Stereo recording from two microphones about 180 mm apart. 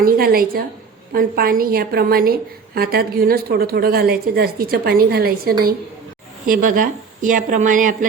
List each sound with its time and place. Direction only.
0.0 s a woman's voice: 55° right (ahead or behind)